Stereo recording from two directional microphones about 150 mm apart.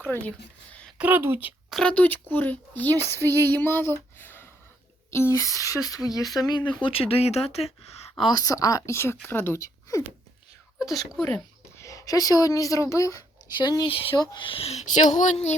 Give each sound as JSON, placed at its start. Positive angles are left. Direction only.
{"t": 0.1, "sound": "speech", "side_deg": 10}
{"t": 0.9, "sound": "speech", "side_deg": -10}
{"t": 1.7, "sound": "speech", "side_deg": 5}
{"t": 4.2, "sound": "a sound", "side_deg": 15}
{"t": 5.1, "sound": "a woman's voice", "side_deg": 20}
{"t": 6.8, "sound": "speech", "side_deg": 40}
{"t": 8.1, "sound": "a woman's voice", "side_deg": 25}
{"t": 10.9, "sound": "speech", "side_deg": 5}
{"t": 11.8, "sound": "speech", "side_deg": 20}